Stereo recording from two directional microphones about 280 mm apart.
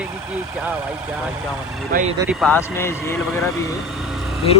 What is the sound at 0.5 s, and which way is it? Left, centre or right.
Speech, centre.